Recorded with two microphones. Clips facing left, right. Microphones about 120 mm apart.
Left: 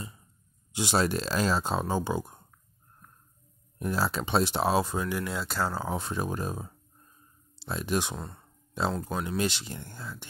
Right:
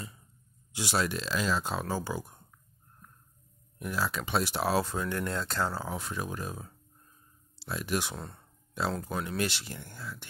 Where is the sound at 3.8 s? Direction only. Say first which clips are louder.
Left 4 dB; 35° left (ahead or behind); by 5.6 s 5° left (ahead or behind).